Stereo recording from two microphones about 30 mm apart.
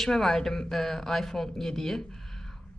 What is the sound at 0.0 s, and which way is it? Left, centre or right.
A woman's voice, centre.